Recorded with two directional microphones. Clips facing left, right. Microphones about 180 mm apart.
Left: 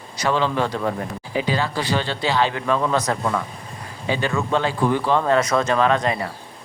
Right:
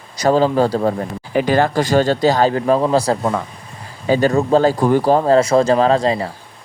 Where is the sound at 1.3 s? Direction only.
50° right (ahead or behind); by 6.3 s 30° right (ahead or behind).